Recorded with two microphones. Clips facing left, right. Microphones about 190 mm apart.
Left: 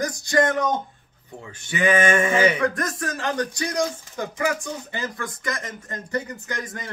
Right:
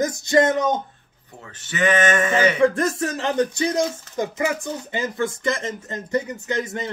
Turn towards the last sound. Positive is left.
turn(degrees=-25)  # may be behind; listen again after turning